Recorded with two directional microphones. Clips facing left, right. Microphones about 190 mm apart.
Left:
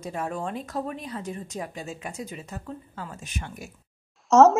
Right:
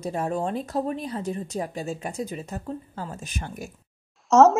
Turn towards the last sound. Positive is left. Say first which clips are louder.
# even
turn(degrees=0)  # may be behind; listen again after turning